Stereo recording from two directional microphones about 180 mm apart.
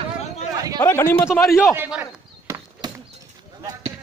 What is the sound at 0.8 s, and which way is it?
Speech, 15° left (ahead or behind).